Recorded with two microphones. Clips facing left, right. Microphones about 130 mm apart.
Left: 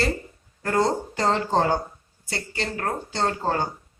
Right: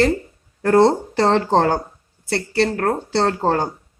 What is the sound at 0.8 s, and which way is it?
Speech, 75° right (ahead or behind).